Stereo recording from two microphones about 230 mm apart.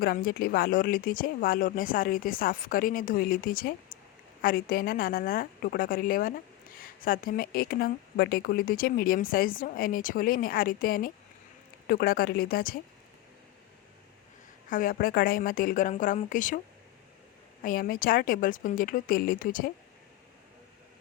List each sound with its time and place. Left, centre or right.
0.0 s a woman's voice: left
14.7 s a woman's voice: left
17.6 s a woman's voice: left